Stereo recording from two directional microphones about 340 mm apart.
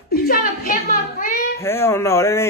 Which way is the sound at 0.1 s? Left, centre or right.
Left.